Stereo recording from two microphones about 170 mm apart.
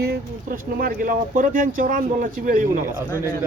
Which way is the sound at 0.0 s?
65° right (ahead or behind).